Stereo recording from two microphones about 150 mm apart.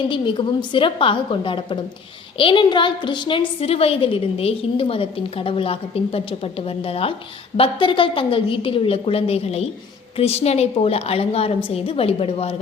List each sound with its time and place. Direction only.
0.1 s a woman's voice: 35° left (ahead or behind)